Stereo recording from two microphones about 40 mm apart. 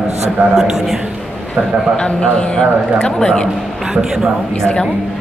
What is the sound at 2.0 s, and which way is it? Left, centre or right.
A man's voice, left.